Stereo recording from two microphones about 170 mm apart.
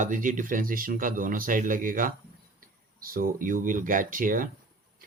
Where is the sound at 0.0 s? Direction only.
50° right (ahead or behind).